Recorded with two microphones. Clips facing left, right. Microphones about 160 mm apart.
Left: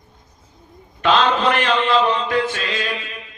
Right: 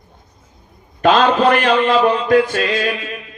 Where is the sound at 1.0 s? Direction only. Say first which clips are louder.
Right 4 dB; 45° right (ahead or behind).